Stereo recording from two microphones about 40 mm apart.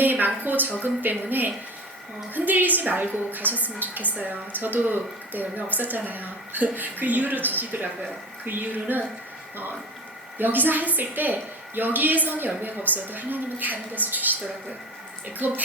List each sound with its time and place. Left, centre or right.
0.0 s a sound: right
0.4 s a woman's voice: right
10.3 s a woman's voice: right
15.4 s a woman's voice: right